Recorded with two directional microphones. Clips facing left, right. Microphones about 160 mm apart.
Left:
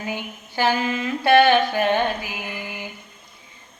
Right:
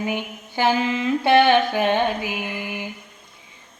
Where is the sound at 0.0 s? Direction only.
20° right (ahead or behind).